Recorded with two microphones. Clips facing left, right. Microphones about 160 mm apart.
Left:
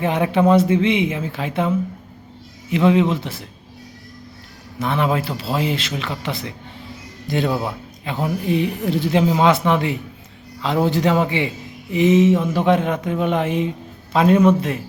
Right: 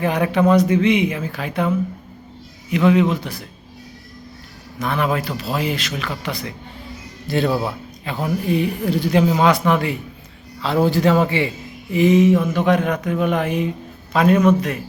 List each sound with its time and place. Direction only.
0.0 s a man's voice: 25° left (ahead or behind)
4.8 s a man's voice: 25° left (ahead or behind)